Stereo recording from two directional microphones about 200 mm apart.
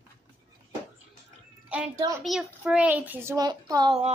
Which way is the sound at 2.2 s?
5° right (ahead or behind).